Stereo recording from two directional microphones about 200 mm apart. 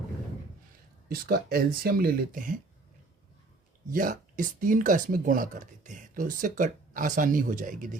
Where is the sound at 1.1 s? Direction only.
50° right (ahead or behind).